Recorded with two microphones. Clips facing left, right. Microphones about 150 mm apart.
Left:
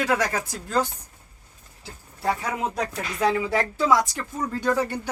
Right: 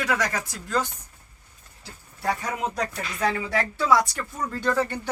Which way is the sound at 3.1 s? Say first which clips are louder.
Left 3 dB; 25° left (ahead or behind).